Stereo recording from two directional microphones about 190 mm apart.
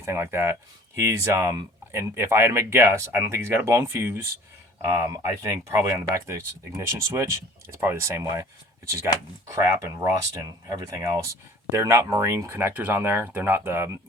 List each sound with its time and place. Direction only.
0.0 s speech: 15° right (ahead or behind)
9.5 s speech: 15° right (ahead or behind)